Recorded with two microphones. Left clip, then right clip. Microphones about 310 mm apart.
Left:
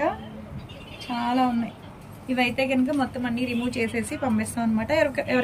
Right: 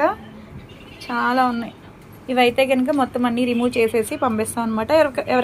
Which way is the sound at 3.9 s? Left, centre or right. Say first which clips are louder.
Right 7 dB; right.